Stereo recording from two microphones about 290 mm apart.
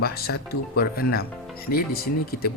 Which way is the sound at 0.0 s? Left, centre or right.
Left.